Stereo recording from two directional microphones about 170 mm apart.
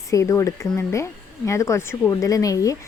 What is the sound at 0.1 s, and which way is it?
Speech, 20° left (ahead or behind).